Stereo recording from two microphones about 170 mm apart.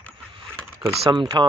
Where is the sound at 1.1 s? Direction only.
30° right (ahead or behind).